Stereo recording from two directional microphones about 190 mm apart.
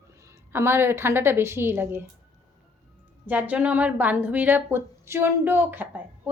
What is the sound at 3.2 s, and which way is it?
A woman's voice, 10° right (ahead or behind).